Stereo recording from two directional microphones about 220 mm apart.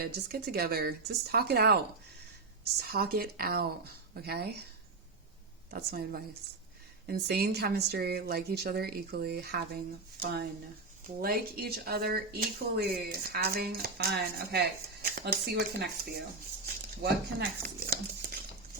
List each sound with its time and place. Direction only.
0.0 s speech: 45° right (ahead or behind)
5.7 s speech: 45° right (ahead or behind)
17.0 s speech: 45° right (ahead or behind)